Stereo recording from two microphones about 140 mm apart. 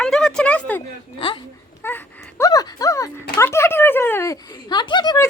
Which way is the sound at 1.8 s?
15° left (ahead or behind).